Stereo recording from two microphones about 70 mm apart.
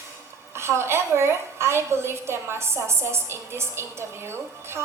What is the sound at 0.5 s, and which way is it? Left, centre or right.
A woman's voice, right.